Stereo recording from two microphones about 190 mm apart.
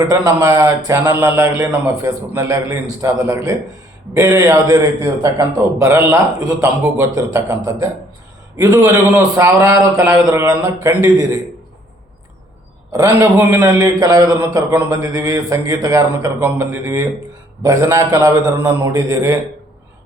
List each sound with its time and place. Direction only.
0.0 s a man's voice: 20° right (ahead or behind)
12.9 s a man's voice: 15° right (ahead or behind)